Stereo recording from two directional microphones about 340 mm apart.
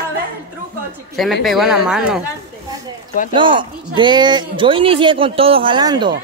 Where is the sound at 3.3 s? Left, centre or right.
Centre.